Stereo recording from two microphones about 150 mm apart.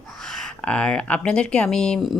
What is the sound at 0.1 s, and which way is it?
Speech, centre (ahead or behind).